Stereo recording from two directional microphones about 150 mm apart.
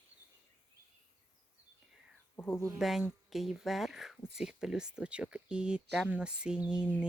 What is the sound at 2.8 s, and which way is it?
Speech, centre (ahead or behind).